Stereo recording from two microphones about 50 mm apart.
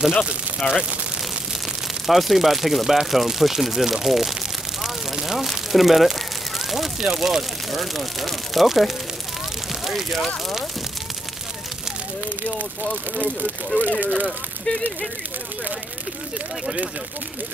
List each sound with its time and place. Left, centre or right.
0.6 s speech: centre
2.0 s speech: centre
13.7 s speech: right
14.1 s speech: left